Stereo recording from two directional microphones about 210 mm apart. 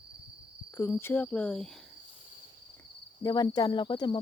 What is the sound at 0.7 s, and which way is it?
Speech, 10° left (ahead or behind).